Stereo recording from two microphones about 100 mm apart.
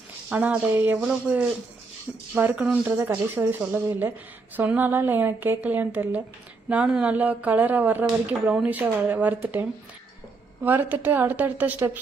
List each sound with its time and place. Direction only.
0.3 s a woman's voice: 15° right (ahead or behind)